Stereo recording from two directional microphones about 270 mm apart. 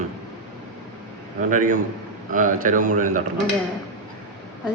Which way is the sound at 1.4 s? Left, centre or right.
Right.